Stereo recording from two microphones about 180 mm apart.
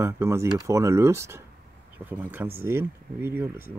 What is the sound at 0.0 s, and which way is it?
Speech, 15° right (ahead or behind).